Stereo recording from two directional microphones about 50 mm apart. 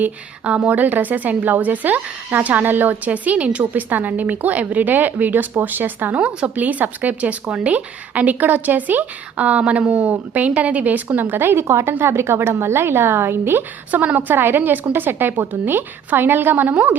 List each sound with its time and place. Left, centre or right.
0.4 s speech: right
6.1 s speech: right
11.7 s a woman's voice: right
13.9 s speech: right